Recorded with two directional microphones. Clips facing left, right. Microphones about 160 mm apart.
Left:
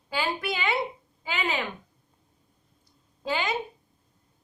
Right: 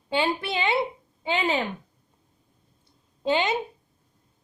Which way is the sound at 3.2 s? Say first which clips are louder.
Right 5 dB; 25° right (ahead or behind).